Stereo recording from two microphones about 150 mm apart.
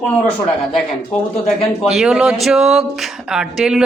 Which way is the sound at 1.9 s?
5° right (ahead or behind).